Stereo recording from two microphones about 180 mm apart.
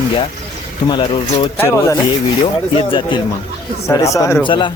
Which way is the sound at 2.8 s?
25° left (ahead or behind).